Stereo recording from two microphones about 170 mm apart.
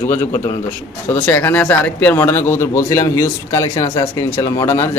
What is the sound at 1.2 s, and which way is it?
Speech, 10° left (ahead or behind).